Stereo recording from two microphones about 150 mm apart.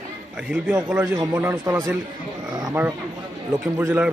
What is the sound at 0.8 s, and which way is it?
Speech, 10° right (ahead or behind).